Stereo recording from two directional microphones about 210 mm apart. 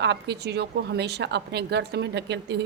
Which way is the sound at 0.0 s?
55° right (ahead or behind).